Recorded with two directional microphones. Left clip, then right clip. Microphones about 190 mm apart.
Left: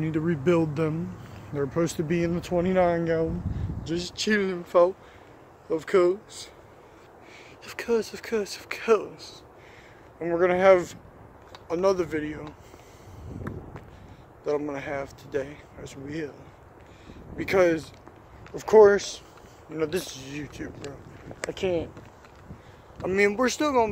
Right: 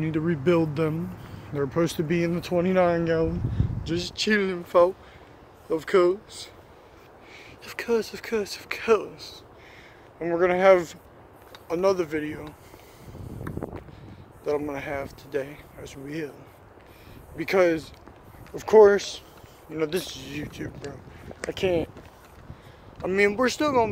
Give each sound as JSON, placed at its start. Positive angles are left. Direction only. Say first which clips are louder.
{"t": 0.0, "sound": "speech", "louder": "right 1 dB", "side_deg": 0}
{"t": 7.6, "sound": "speech", "louder": "right 1 dB", "side_deg": 0}
{"t": 13.5, "sound": "vehicle", "louder": "right 2 dB", "side_deg": 0}
{"t": 14.4, "sound": "speech", "louder": "right 1 dB", "side_deg": 0}
{"t": 17.4, "sound": "speech", "louder": "even", "side_deg": 5}
{"t": 21.5, "sound": "speech", "louder": "right 3 dB", "side_deg": -20}
{"t": 23.0, "sound": "speech", "louder": "right 1 dB", "side_deg": 0}